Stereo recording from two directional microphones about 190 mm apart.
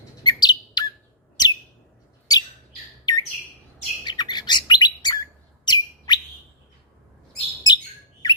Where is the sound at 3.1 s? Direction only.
20° left (ahead or behind).